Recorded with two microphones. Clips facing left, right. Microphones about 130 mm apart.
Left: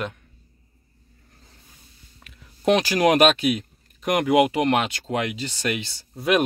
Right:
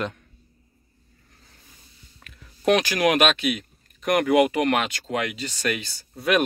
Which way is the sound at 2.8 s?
30° left (ahead or behind).